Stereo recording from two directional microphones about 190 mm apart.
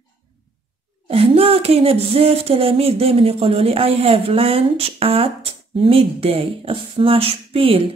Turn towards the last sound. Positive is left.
turn(degrees=-30)  # may be behind; listen again after turning